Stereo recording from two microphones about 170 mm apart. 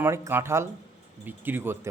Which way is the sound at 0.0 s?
15° right (ahead or behind).